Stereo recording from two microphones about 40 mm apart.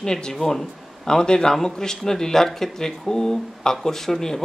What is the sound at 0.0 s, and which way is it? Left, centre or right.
A man's voice, centre.